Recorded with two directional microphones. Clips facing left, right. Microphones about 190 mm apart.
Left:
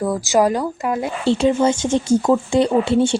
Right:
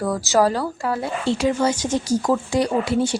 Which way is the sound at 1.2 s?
30° left (ahead or behind).